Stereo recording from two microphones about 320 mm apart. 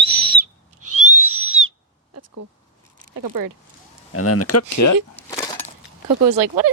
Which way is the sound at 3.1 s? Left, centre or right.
Right.